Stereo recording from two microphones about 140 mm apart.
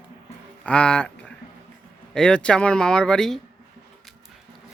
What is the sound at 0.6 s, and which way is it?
Speech, 5° left (ahead or behind).